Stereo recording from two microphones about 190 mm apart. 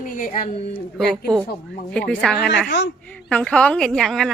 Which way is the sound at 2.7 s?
70° left (ahead or behind).